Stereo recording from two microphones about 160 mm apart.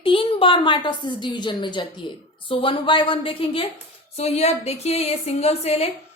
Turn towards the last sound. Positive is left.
turn(degrees=40)  # may be behind; listen again after turning